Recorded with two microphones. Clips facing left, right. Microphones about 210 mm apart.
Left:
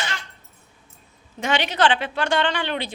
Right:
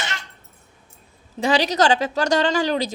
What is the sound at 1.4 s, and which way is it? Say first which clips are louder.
A woman's voice: right 3 dB; 35° right (ahead or behind).